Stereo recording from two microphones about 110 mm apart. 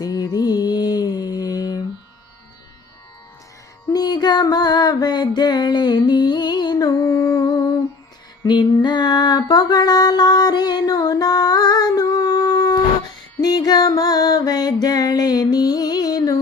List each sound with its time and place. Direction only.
0.0 s music: 40° left (ahead or behind)
3.9 s music: 40° left (ahead or behind)